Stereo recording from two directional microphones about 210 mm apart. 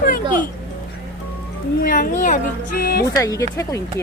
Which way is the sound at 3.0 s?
15° left (ahead or behind).